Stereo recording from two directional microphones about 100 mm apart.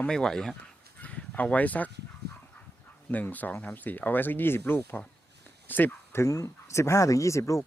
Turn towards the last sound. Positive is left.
turn(degrees=30)  # may be behind; listen again after turning